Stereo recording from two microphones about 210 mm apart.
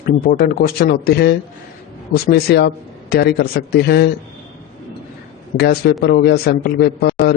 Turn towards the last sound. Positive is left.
turn(degrees=50)  # may be behind; listen again after turning